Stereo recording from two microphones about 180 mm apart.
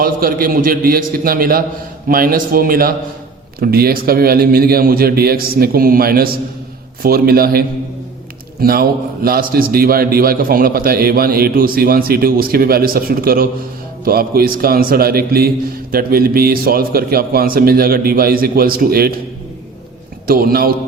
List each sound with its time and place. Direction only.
0.0 s a man's voice: 55° right (ahead or behind)
8.6 s a man's voice: 55° right (ahead or behind)
20.2 s a man's voice: 55° right (ahead or behind)